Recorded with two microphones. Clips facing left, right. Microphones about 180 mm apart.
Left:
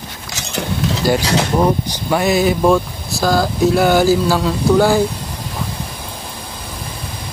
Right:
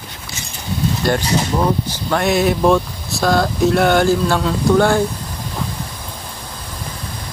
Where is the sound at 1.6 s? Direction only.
15° left (ahead or behind).